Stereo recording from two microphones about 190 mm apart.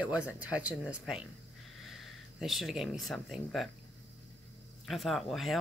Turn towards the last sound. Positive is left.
turn(degrees=0)  # may be behind; listen again after turning